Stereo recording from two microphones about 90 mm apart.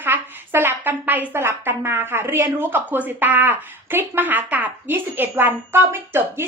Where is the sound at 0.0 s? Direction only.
25° right (ahead or behind).